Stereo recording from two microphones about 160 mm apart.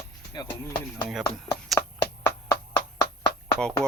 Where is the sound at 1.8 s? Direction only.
20° left (ahead or behind).